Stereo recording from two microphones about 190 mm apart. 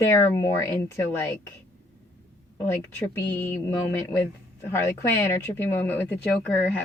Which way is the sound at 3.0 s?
10° left (ahead or behind).